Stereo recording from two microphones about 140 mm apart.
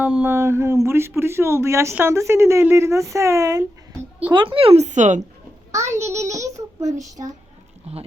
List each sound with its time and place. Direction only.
0.0 s speech: 10° right (ahead or behind)
4.3 s speech: 35° right (ahead or behind); by 5.2 s 60° right (ahead or behind)
5.7 s speech: 20° right (ahead or behind)
7.2 s speech: 50° right (ahead or behind)